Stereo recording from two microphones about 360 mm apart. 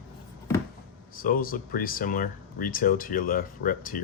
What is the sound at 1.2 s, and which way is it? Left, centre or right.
Speech, left.